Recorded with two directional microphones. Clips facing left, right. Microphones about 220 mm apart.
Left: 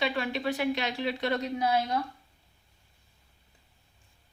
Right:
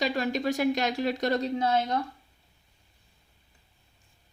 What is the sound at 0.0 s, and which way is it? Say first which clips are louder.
Speech: right 3 dB; 40° right (ahead or behind).